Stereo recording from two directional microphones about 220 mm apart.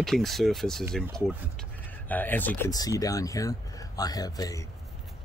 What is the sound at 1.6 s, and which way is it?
Speech, 5° left (ahead or behind).